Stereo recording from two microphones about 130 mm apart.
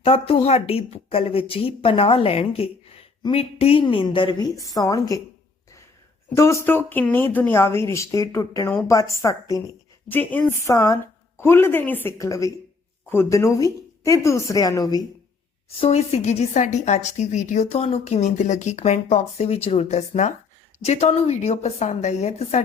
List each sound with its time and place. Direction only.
0.0 s a woman's voice: 45° left (ahead or behind); by 5.2 s 25° left (ahead or behind)
6.3 s speech: 20° left (ahead or behind)
10.1 s speech: 15° left (ahead or behind)
12.1 s speech: 25° left (ahead or behind)
15.8 s speech: 55° left (ahead or behind)